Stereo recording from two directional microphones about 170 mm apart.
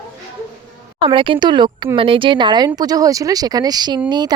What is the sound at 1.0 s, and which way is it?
Speech, 30° right (ahead or behind).